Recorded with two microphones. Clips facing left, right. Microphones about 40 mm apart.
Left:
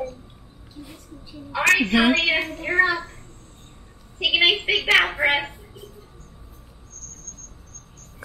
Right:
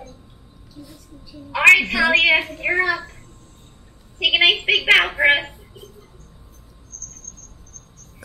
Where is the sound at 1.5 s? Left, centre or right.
Right.